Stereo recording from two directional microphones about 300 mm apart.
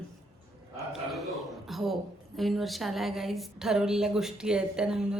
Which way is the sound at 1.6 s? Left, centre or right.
Centre.